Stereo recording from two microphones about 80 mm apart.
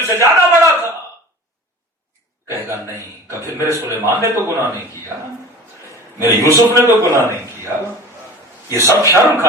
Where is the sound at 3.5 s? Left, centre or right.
Right.